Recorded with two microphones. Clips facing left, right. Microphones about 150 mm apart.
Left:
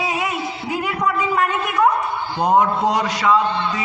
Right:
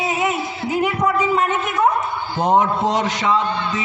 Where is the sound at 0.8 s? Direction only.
20° right (ahead or behind).